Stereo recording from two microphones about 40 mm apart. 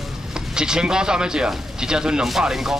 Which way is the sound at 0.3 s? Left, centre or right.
Centre.